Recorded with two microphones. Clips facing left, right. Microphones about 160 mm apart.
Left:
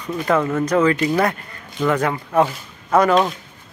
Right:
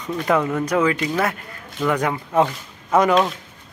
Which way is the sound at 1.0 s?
10° left (ahead or behind).